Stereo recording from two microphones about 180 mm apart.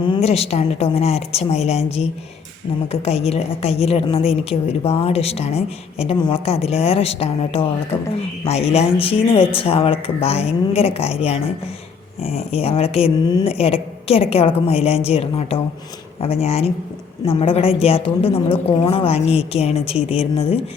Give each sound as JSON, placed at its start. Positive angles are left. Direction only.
{"t": 0.2, "sound": "a woman's voice", "side_deg": 35}
{"t": 6.1, "sound": "speech", "side_deg": 25}
{"t": 6.4, "sound": "a woman's voice", "side_deg": 35}